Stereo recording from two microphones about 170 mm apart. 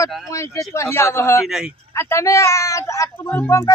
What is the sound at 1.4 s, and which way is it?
Speech, 5° right (ahead or behind).